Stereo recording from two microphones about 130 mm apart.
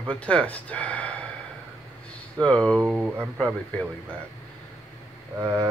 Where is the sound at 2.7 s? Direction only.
10° right (ahead or behind).